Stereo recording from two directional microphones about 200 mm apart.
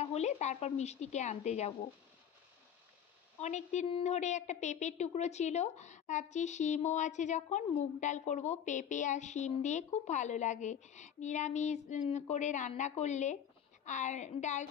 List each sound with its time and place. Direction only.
0.0 s a woman's voice: 30° left (ahead or behind)
3.3 s a woman's voice: 35° left (ahead or behind)